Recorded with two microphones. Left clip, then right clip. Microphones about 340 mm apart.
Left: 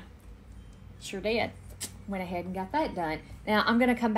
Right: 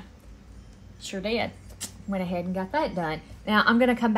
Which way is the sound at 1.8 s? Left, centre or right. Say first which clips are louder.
Right 4 dB; right.